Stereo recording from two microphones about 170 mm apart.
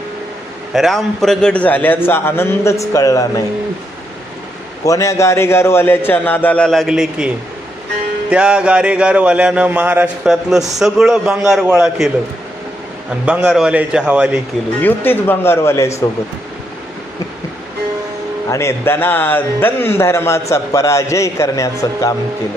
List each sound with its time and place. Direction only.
0.7 s a man's voice: centre (ahead or behind); by 3.4 s 20° left (ahead or behind)
4.8 s a man's voice: 20° left (ahead or behind); by 7.3 s 5° right (ahead or behind)
8.3 s a sound: 5° right (ahead or behind)
13.2 s a man's voice: 5° right (ahead or behind)
14.8 s a man's voice: 10° left (ahead or behind)
18.5 s a man's voice: 15° left (ahead or behind)